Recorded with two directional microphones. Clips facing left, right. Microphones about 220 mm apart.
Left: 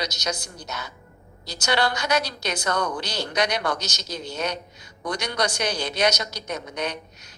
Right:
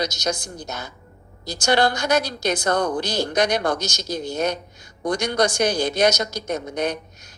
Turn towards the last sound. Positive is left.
turn(degrees=-50)  # may be behind; listen again after turning